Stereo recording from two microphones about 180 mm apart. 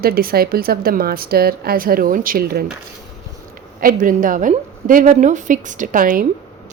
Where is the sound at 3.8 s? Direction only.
50° right (ahead or behind).